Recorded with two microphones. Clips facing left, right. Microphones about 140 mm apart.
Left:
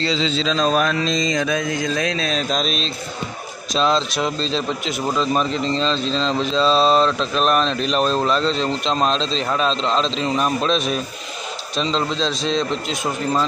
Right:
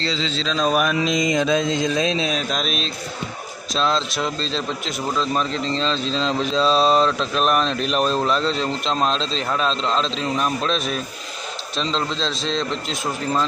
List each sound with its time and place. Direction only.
0.0 s speech: 15° left (ahead or behind)
0.4 s speech: 5° right (ahead or behind); by 2.3 s 20° right (ahead or behind)
2.3 s speech: 5° right (ahead or behind)